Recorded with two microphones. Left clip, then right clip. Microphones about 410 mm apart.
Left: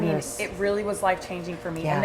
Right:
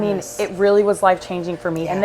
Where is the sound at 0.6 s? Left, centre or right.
Right.